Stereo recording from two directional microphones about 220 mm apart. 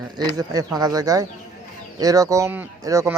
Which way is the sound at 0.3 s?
15° right (ahead or behind).